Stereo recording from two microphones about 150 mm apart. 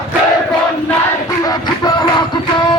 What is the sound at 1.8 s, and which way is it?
Music, 30° left (ahead or behind).